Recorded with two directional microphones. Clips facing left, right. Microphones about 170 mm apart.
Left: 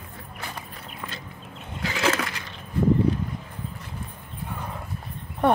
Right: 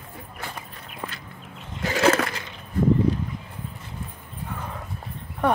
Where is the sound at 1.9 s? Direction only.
45° right (ahead or behind).